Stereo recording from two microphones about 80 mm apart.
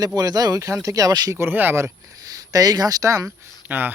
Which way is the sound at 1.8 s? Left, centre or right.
Right.